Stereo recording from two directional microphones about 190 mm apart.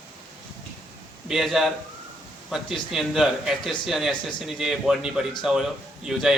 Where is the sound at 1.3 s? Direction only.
Centre (ahead or behind).